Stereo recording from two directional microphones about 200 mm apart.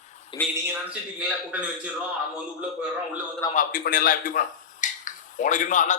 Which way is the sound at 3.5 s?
45° left (ahead or behind).